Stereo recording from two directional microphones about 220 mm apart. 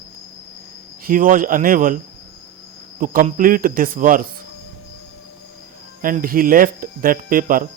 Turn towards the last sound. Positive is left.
turn(degrees=-40)  # may be behind; listen again after turning